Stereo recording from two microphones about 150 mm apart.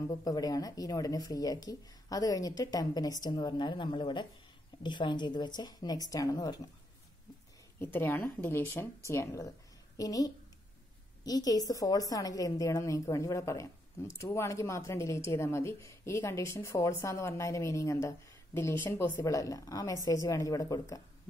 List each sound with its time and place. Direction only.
0.2 s speech: 25° left (ahead or behind)
7.8 s a woman's voice: 15° left (ahead or behind)